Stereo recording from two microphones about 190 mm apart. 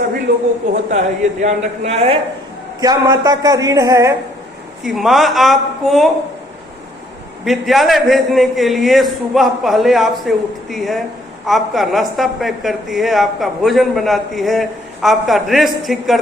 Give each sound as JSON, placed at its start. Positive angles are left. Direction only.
{"t": 0.9, "sound": "a man's voice", "side_deg": -40}
{"t": 2.8, "sound": "speech", "side_deg": -20}
{"t": 4.8, "sound": "a woman's voice", "side_deg": 0}
{"t": 7.4, "sound": "a woman's voice", "side_deg": 0}